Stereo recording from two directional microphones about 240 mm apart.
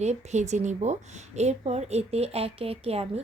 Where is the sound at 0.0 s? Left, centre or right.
Right.